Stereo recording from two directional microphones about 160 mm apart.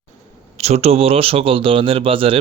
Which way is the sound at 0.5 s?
40° right (ahead or behind).